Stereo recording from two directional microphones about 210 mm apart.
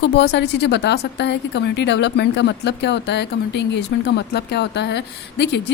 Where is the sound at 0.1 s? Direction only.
55° left (ahead or behind).